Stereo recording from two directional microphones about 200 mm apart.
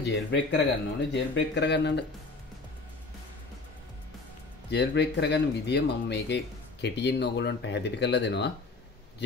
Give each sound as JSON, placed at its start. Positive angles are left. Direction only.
{"t": 0.0, "sound": "speech", "side_deg": 60}
{"t": 4.6, "sound": "speech", "side_deg": 60}